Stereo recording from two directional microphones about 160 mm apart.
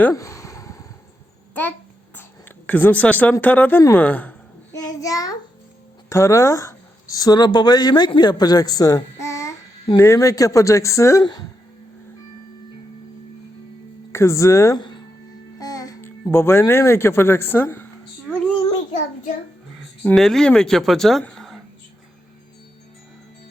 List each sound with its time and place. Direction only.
0.0 s a sound: 20° left (ahead or behind)
2.6 s speech: 10° left (ahead or behind)
4.7 s a child's voice: 20° left (ahead or behind)
14.1 s speech: 15° left (ahead or behind)
20.1 s speech: centre (ahead or behind)